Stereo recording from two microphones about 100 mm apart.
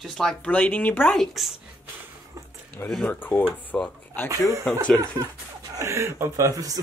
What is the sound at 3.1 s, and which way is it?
Speech, 20° left (ahead or behind).